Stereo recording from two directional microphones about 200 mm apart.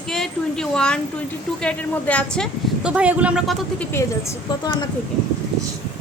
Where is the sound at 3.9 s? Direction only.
15° left (ahead or behind).